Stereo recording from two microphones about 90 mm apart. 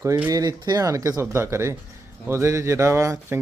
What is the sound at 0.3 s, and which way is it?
A man's voice, 45° right (ahead or behind).